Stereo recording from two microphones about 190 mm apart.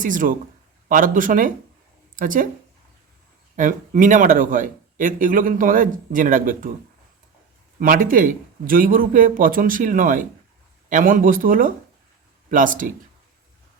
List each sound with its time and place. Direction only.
0.0 s speech: 45° right (ahead or behind)
3.5 s speech: 45° right (ahead or behind)
7.8 s speech: 45° right (ahead or behind)